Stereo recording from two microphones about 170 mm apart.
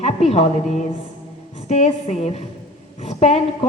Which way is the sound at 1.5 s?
40° left (ahead or behind).